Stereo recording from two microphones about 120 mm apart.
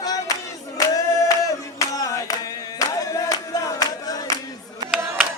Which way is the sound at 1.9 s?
30° left (ahead or behind).